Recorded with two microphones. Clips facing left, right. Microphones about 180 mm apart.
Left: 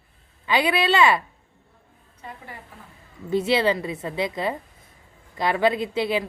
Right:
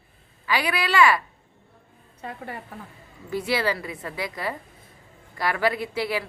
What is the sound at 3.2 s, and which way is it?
A woman's voice, 25° left (ahead or behind).